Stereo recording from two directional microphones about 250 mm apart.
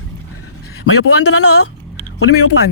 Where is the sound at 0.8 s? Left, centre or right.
Left.